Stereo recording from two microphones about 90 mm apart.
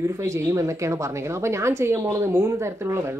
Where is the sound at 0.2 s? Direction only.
35° right (ahead or behind).